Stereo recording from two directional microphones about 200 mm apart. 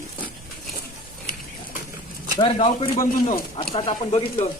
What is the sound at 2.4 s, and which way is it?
Speech, 30° left (ahead or behind).